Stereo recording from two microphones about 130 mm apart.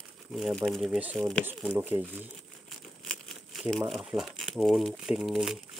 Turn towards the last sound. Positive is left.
turn(degrees=-5)  # may be behind; listen again after turning